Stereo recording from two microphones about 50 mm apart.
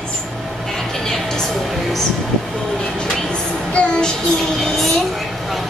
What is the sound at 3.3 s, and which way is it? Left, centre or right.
Child singing, centre.